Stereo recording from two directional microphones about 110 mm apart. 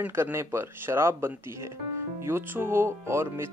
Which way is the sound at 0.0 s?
20° right (ahead or behind).